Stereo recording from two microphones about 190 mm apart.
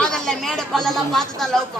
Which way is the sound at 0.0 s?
Centre (ahead or behind).